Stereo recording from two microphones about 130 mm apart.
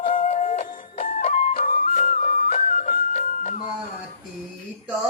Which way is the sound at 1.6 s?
90° left.